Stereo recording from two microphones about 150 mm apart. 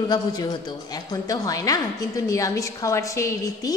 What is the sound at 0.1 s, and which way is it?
A woman's voice, 25° left (ahead or behind).